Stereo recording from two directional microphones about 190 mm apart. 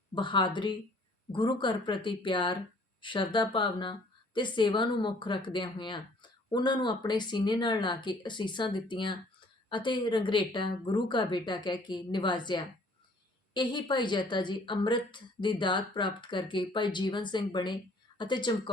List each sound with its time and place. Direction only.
0.1 s speech: 25° left (ahead or behind)